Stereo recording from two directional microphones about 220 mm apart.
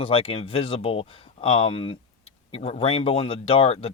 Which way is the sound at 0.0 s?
25° left (ahead or behind).